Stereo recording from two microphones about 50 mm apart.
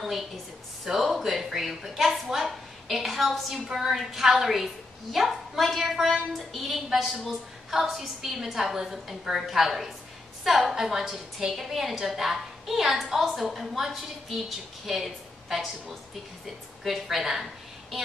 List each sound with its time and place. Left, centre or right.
0.8 s a woman's voice: centre